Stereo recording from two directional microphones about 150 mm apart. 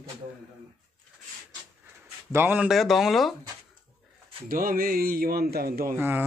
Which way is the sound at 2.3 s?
10° right (ahead or behind).